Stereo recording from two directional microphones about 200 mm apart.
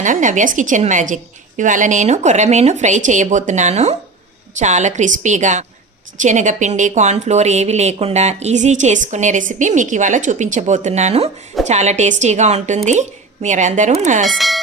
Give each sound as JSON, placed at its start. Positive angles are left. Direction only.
{"t": 0.0, "sound": "speech", "side_deg": -40}
{"t": 14.3, "sound": "speech", "side_deg": 0}